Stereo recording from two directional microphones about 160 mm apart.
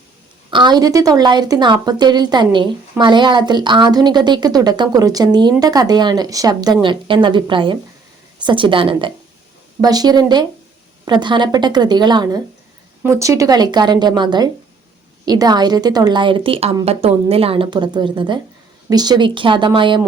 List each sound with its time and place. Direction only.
0.5 s a woman's voice: 25° right (ahead or behind)